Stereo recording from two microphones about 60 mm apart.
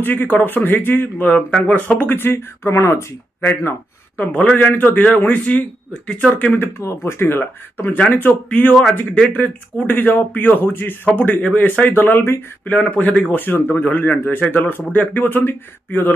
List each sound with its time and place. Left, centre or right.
0.0 s speech: left
3.3 s speech: left
6.8 s speech: left
11.1 s speech: left
11.9 s speech: left